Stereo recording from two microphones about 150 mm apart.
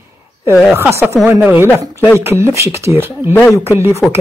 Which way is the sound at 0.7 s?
15° right (ahead or behind).